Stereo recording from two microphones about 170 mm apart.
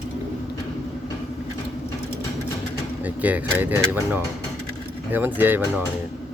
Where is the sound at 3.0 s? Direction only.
10° right (ahead or behind).